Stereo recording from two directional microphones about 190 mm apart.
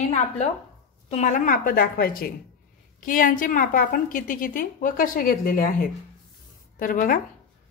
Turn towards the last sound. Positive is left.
turn(degrees=45)  # may be behind; listen again after turning